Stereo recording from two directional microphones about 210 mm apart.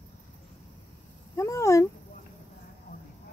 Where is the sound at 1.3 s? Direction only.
15° left (ahead or behind).